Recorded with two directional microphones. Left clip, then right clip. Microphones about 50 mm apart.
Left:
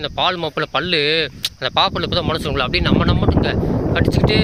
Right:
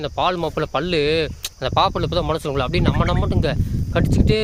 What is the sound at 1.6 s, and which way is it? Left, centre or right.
Speech, right.